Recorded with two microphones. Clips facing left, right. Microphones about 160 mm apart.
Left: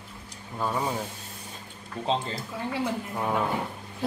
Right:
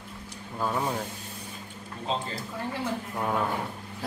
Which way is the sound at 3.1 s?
5° left (ahead or behind).